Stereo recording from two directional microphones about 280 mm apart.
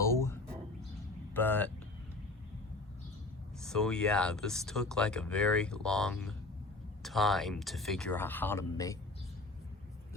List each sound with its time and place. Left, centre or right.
0.0 s a sound: centre
1.3 s speech: centre
3.6 s speech: centre